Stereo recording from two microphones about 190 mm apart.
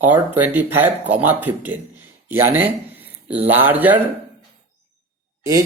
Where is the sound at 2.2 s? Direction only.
10° right (ahead or behind).